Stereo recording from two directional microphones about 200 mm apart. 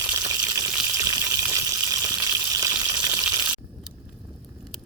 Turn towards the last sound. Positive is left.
turn(degrees=-20)  # may be behind; listen again after turning